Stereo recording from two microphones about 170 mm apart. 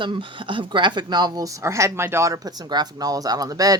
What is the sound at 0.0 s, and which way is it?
Speech, 30° right (ahead or behind).